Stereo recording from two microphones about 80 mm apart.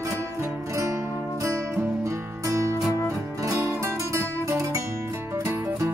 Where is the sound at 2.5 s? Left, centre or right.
Right.